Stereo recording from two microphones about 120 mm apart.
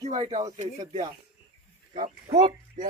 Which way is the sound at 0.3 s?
30° right (ahead or behind).